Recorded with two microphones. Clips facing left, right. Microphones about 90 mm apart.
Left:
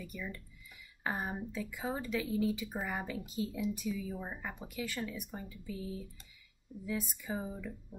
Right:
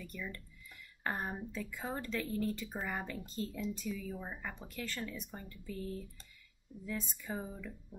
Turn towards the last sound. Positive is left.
turn(degrees=5)  # may be behind; listen again after turning